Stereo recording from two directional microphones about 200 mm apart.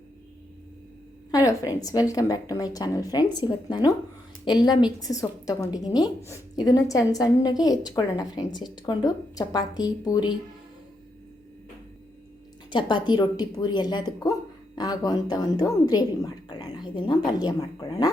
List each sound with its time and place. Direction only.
1.3 s a woman's voice: 15° left (ahead or behind)
12.7 s a woman's voice: 20° left (ahead or behind)